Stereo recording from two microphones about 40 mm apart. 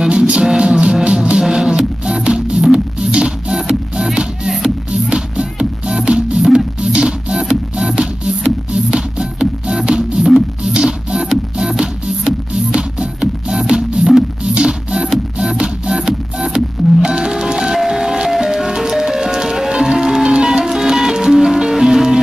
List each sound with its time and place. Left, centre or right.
0.5 s music: right
1.4 s music: centre
11.1 s music: centre
12.7 s music: right
13.5 s music: centre